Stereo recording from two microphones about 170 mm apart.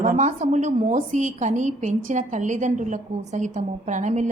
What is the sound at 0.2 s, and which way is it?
A woman's voice, 45° right (ahead or behind).